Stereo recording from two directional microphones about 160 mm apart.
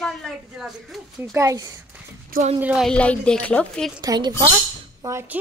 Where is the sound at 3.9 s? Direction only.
25° right (ahead or behind).